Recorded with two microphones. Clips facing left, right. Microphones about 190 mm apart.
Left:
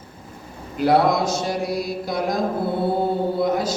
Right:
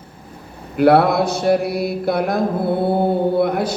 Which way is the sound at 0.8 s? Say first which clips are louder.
Right 4 dB; 60° right (ahead or behind).